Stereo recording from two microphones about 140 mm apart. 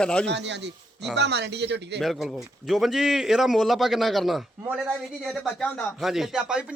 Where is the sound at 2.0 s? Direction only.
Centre (ahead or behind).